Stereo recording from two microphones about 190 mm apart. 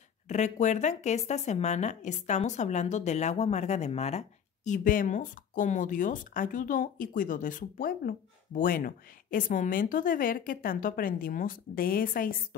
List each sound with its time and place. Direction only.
0.3 s speech: 40° left (ahead or behind)